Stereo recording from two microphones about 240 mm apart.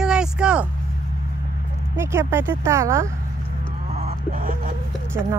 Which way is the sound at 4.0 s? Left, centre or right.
Right.